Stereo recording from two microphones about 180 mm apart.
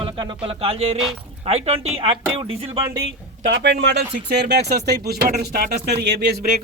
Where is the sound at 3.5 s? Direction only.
70° right (ahead or behind).